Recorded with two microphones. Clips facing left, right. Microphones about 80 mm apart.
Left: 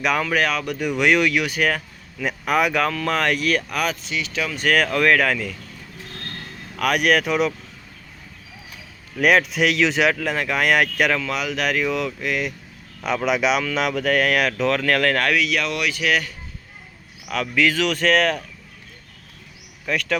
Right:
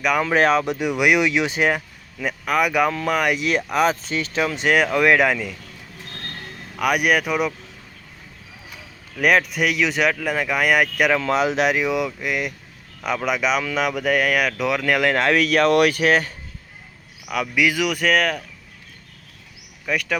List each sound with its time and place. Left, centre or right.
0.2 s speech: right
2.2 s speech: centre; by 3.9 s right
4.0 s speech: right; by 5.5 s centre
6.7 s speech: centre
9.1 s speech: centre
11.2 s speech: right
15.4 s speech: right
17.2 s speech: centre
19.8 s speech: centre